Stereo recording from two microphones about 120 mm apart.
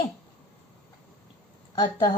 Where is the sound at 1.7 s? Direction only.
35° left (ahead or behind).